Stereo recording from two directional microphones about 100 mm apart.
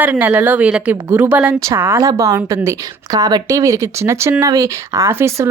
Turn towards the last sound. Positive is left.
turn(degrees=-25)  # may be behind; listen again after turning